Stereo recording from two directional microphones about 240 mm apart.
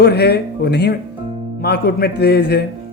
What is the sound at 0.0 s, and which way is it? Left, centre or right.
A man's voice, left.